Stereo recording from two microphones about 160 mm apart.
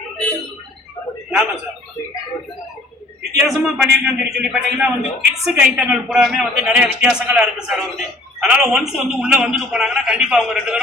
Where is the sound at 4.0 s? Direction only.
5° right (ahead or behind).